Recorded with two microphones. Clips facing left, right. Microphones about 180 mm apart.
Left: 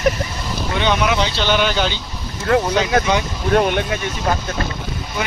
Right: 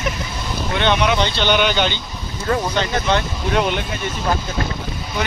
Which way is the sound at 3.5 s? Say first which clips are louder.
Left 4 dB; 50° left (ahead or behind).